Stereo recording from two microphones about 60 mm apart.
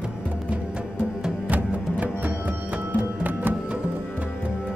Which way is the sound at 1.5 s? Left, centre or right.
Right.